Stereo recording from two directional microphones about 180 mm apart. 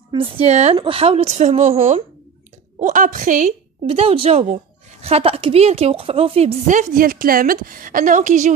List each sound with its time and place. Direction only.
0.1 s a woman's voice: 30° right (ahead or behind)
3.8 s speech: 30° right (ahead or behind)